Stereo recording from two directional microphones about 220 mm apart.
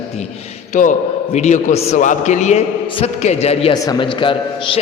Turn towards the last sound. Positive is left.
turn(degrees=20)  # may be behind; listen again after turning